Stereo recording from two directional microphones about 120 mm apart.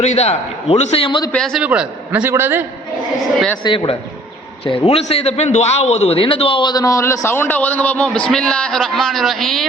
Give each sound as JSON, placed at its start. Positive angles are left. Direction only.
{"t": 0.0, "sound": "a man's voice", "side_deg": 65}
{"t": 1.3, "sound": "a man's voice", "side_deg": 5}
{"t": 1.6, "sound": "a man's voice", "side_deg": -10}
{"t": 3.6, "sound": "a man's voice", "side_deg": 45}
{"t": 4.9, "sound": "a man's voice", "side_deg": 60}